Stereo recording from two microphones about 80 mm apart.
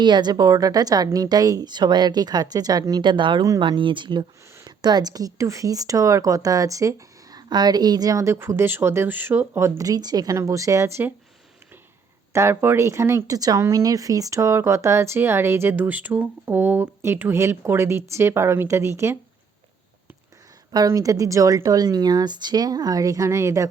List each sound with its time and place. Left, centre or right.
0.0 s speech: right
3.0 s speech: right
4.6 s speech: right
9.6 s speech: right
10.3 s speech: right
12.3 s speech: right
13.3 s speech: right
13.6 s speech: right
20.7 s speech: right